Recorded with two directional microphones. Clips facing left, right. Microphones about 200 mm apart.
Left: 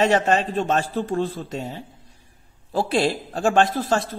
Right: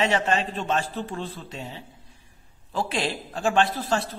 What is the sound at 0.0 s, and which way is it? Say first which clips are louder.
A man's voice: left 5 dB; 45° left (ahead or behind).